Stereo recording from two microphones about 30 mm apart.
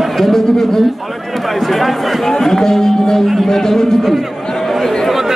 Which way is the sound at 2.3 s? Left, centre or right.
Centre.